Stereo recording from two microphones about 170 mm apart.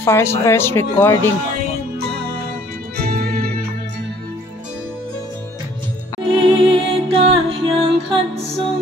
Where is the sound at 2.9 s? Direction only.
65° right (ahead or behind).